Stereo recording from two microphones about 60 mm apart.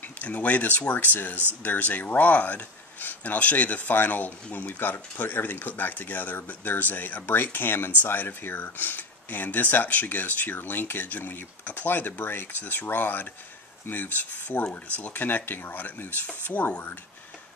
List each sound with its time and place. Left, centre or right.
0.2 s speech: left